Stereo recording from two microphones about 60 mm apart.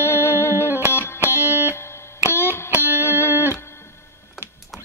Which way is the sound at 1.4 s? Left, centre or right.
Right.